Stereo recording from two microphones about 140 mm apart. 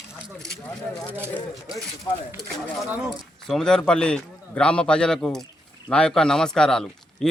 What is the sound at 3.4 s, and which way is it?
Speech, 5° left (ahead or behind).